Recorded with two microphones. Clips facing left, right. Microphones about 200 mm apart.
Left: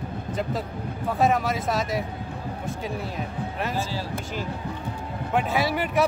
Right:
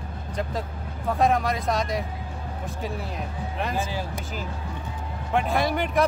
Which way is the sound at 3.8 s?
15° right (ahead or behind).